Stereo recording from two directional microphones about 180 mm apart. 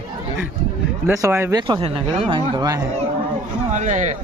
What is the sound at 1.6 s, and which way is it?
Speech, 30° right (ahead or behind).